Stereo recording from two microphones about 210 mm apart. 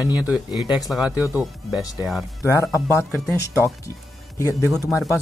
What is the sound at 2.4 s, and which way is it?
Speech, 15° left (ahead or behind).